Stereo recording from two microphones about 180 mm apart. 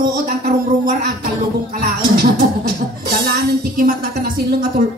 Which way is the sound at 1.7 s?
55° right (ahead or behind).